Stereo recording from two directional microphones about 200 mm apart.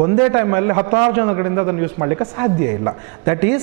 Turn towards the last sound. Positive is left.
turn(degrees=-15)  # may be behind; listen again after turning